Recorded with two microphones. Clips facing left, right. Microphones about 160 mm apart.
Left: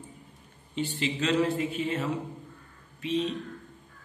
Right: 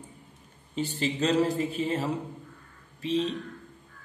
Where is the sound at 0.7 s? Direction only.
40° right (ahead or behind).